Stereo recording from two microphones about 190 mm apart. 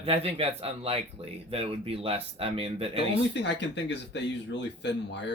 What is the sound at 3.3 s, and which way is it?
Speech, 70° left (ahead or behind).